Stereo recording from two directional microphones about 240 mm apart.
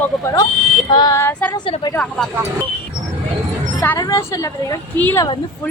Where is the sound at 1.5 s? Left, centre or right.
Centre.